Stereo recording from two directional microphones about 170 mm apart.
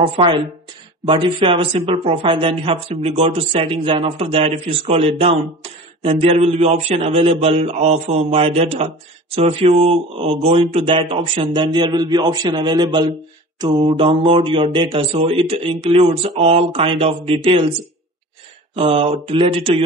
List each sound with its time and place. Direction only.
0.0 s a man's voice: 30° right (ahead or behind)
18.8 s speech: 35° right (ahead or behind)